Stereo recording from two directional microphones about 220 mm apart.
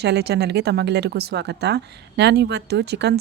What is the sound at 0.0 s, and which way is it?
Speech, 50° right (ahead or behind).